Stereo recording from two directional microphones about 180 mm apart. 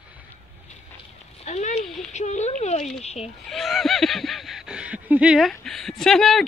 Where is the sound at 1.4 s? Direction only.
40° left (ahead or behind).